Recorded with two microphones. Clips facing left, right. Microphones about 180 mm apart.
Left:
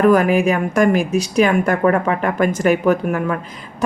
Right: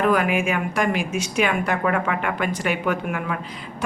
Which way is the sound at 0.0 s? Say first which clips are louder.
Left 7 dB; 45° left (ahead or behind).